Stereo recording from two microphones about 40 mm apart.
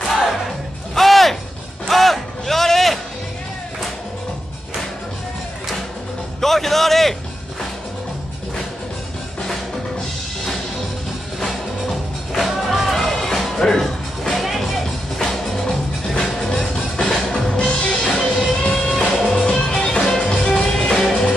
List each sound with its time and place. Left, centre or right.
0.1 s music: centre
1.9 s a sound: centre
6.4 s a sound: centre
12.4 s music: centre
18.1 s music: centre; by 19.7 s left
20.1 s music: centre